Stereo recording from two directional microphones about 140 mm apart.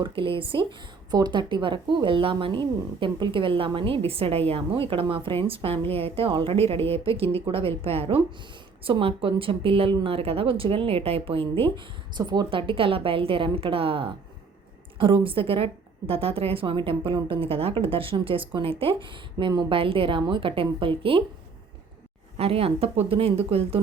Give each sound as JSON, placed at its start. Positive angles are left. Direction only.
{"t": 0.0, "sound": "a woman's voice", "side_deg": -40}
{"t": 22.4, "sound": "speech", "side_deg": -45}